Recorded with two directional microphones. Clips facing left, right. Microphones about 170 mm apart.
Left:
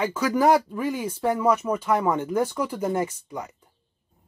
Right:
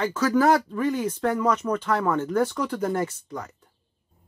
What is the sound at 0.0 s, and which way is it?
Speech, 10° left (ahead or behind).